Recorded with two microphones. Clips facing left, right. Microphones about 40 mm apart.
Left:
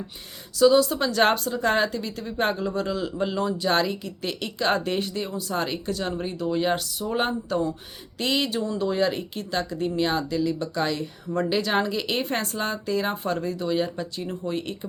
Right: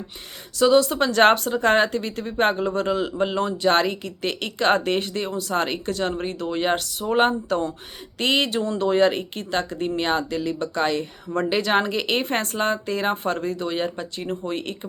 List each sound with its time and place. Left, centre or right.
0.6 s a woman's voice: right